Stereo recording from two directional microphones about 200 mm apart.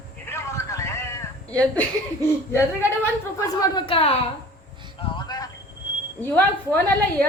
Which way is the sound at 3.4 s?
20° left (ahead or behind).